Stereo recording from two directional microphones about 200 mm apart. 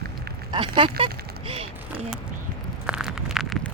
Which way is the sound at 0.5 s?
25° right (ahead or behind).